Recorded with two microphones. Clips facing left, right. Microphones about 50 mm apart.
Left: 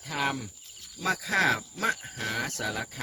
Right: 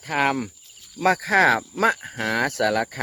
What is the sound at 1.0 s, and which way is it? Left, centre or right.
Speech, right.